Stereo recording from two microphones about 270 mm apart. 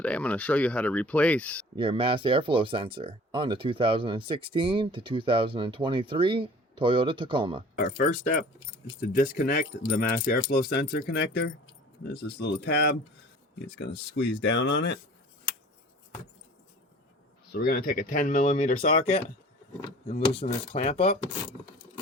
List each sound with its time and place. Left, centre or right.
0.0 s speech: centre
1.7 s speech: centre
7.8 s speech: left
17.5 s speech: left